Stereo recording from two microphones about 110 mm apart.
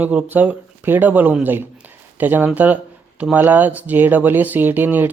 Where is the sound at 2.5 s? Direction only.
15° right (ahead or behind).